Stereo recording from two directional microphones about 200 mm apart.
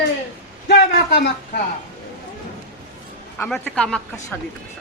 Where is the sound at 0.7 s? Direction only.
55° left (ahead or behind).